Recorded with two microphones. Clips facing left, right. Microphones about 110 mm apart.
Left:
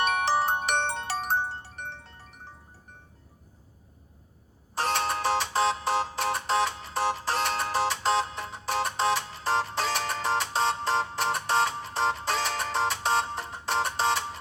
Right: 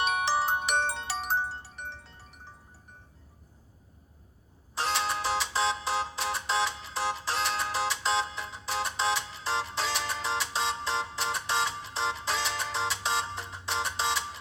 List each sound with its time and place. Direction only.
0.0 s music: 50° left (ahead or behind)
4.7 s music: 50° left (ahead or behind)